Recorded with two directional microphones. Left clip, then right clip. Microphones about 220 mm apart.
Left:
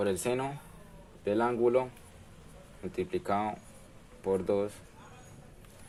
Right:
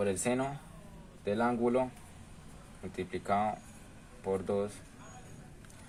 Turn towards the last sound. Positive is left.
turn(degrees=35)  # may be behind; listen again after turning